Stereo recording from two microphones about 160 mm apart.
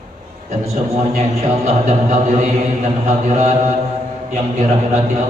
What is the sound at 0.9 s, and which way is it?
A man's voice, 45° right (ahead or behind).